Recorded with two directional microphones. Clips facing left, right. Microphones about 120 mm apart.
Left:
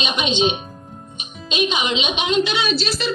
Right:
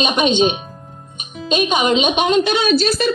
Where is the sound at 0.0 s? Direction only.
45° right (ahead or behind).